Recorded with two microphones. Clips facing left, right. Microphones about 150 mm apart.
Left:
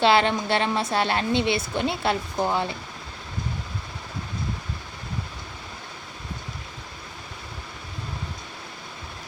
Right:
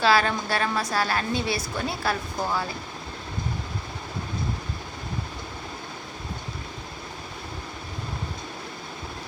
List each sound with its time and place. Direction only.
0.0 s a woman's voice: 25° left (ahead or behind)